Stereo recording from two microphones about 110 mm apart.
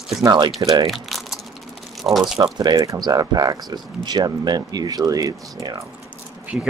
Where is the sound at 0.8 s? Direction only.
Centre (ahead or behind).